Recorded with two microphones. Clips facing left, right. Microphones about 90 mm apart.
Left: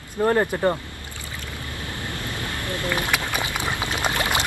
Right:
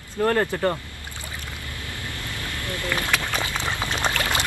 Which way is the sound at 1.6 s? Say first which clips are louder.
Left 3 dB; 20° left (ahead or behind).